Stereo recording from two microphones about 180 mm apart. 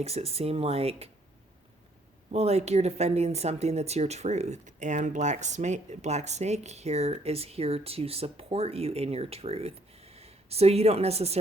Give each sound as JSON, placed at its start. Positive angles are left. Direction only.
{"t": 0.0, "sound": "speech", "side_deg": -35}
{"t": 2.3, "sound": "speech", "side_deg": -35}